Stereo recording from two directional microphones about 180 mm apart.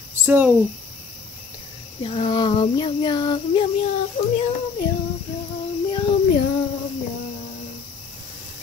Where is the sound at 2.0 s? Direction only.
30° left (ahead or behind).